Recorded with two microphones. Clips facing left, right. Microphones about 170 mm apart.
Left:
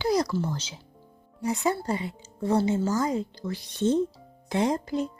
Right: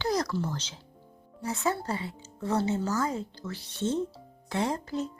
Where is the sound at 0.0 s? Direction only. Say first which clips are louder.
Left 4 dB; 10° left (ahead or behind).